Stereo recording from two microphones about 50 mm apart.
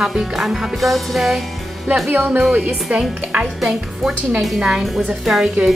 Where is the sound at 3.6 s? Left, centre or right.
Centre.